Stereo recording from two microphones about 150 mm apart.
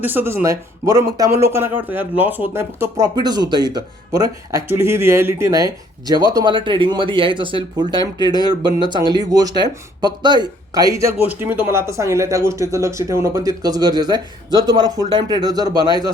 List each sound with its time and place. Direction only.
0.0 s speech: 15° right (ahead or behind)